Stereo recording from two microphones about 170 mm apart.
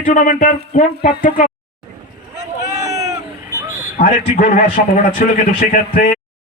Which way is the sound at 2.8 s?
20° right (ahead or behind).